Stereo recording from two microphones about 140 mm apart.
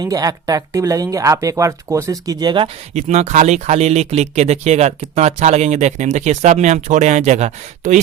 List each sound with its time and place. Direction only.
0.0 s speech: 25° right (ahead or behind)
2.9 s speech: 55° right (ahead or behind)